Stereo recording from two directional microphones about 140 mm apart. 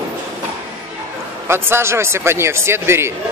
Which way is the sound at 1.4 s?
15° right (ahead or behind).